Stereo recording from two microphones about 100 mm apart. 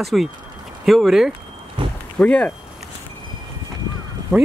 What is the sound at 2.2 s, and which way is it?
Speech, 10° left (ahead or behind).